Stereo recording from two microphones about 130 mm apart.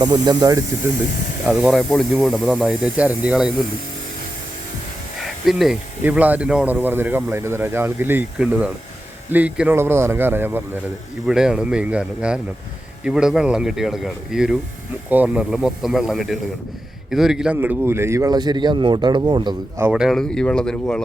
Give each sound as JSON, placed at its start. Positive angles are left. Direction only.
{"t": 0.0, "sound": "a man's voice", "side_deg": -30}
{"t": 1.5, "sound": "speech", "side_deg": 0}
{"t": 5.2, "sound": "a sound", "side_deg": 0}
{"t": 6.0, "sound": "speech", "side_deg": -10}
{"t": 11.3, "sound": "a man's voice", "side_deg": -5}
{"t": 19.9, "sound": "speech", "side_deg": 0}